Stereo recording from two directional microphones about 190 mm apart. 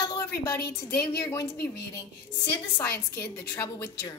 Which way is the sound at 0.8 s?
10° left (ahead or behind).